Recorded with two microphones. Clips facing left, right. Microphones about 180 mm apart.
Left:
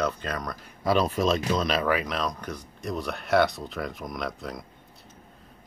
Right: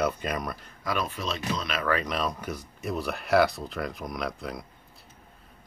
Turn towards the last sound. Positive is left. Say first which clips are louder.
# even
turn(degrees=0)  # may be behind; listen again after turning